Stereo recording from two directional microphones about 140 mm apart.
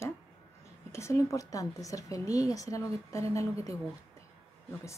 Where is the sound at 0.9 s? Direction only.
20° left (ahead or behind).